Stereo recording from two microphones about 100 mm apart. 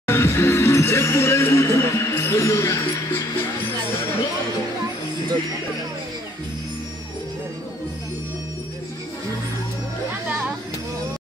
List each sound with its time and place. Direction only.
0.0 s music: 25° left (ahead or behind)